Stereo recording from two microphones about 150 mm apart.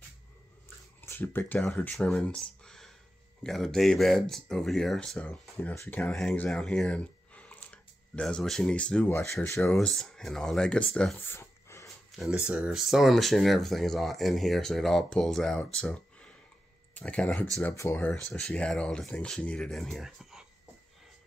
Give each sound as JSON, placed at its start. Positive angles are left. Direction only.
{"t": 1.0, "sound": "speech", "side_deg": 15}
{"t": 9.6, "sound": "speech", "side_deg": 5}
{"t": 11.1, "sound": "a sound", "side_deg": 15}
{"t": 12.1, "sound": "speech", "side_deg": -5}
{"t": 18.1, "sound": "speech", "side_deg": 5}